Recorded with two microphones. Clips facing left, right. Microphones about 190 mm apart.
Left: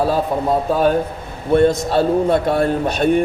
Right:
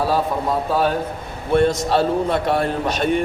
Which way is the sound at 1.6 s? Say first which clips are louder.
Left 3 dB; 50° left (ahead or behind).